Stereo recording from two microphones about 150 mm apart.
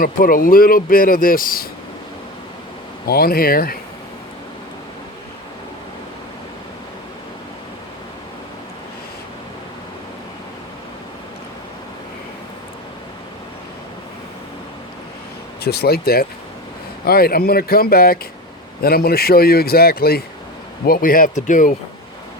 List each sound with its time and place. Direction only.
0.0 s speech: 70° left (ahead or behind)
3.1 s speech: 90° left
15.6 s a man's voice: 90° left
20.8 s speech: 75° left (ahead or behind)